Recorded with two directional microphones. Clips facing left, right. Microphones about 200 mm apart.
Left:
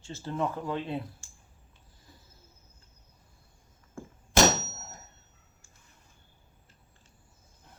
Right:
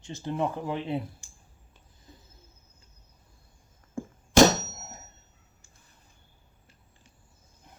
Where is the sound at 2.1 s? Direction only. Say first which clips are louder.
Right 4 dB; 20° right (ahead or behind).